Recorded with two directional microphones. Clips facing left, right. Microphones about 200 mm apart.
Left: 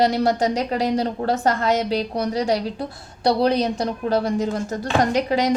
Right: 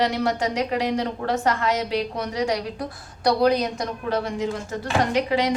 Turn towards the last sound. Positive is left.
turn(degrees=40)  # may be behind; listen again after turning